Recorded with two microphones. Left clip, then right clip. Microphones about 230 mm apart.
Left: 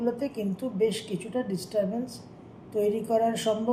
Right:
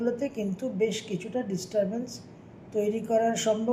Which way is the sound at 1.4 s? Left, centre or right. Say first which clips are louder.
Even; right.